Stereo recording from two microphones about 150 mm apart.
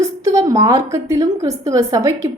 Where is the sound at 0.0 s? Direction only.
20° right (ahead or behind).